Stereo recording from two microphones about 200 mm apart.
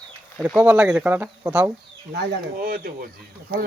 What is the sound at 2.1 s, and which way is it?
Speech, 50° right (ahead or behind).